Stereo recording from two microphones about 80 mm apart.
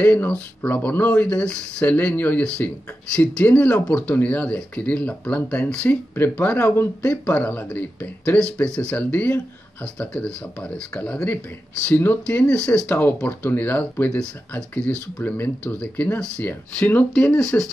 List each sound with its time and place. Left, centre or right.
0.0 s speech: centre
12.8 s speech: left
17.1 s speech: centre